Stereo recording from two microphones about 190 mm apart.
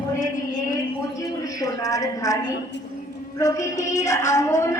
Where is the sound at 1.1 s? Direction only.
20° left (ahead or behind).